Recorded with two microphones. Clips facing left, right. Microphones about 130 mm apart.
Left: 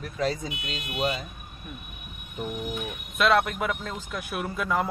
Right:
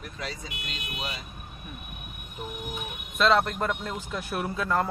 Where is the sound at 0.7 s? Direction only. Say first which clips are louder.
Left 9 dB; 45° left (ahead or behind).